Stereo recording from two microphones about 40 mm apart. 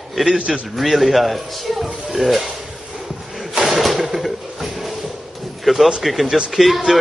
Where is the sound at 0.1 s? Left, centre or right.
Centre.